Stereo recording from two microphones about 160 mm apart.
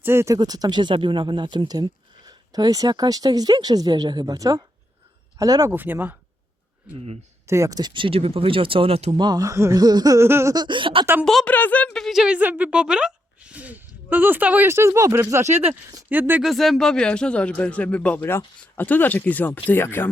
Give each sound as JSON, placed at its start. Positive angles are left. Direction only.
{"t": 0.0, "sound": "speech", "side_deg": -15}
{"t": 5.7, "sound": "speech", "side_deg": -10}
{"t": 7.4, "sound": "speech", "side_deg": -20}
{"t": 11.0, "sound": "speech", "side_deg": -10}
{"t": 11.3, "sound": "speech", "side_deg": 5}
{"t": 16.5, "sound": "speech", "side_deg": 0}